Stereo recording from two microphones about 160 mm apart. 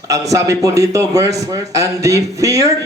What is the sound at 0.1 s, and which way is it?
A man's voice, 20° right (ahead or behind).